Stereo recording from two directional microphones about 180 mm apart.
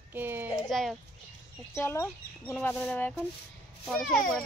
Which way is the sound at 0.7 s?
Centre (ahead or behind).